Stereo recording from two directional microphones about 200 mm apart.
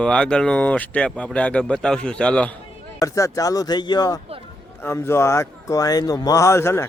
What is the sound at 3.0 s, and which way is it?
Speech, 15° left (ahead or behind).